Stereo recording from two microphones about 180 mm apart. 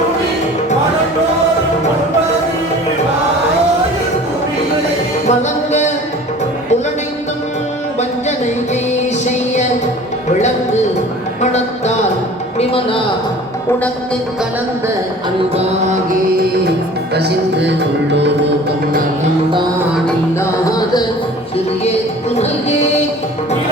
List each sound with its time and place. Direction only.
5.3 s music: 40° left (ahead or behind)
12.5 s a sound: 30° left (ahead or behind)
15.5 s music: 40° right (ahead or behind)
17.2 s music: 70° right (ahead or behind)